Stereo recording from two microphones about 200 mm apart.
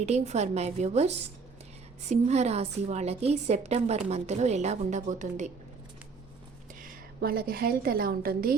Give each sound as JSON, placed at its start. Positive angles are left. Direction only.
{"t": 0.0, "sound": "a woman's voice", "side_deg": -35}
{"t": 6.8, "sound": "a woman's voice", "side_deg": -50}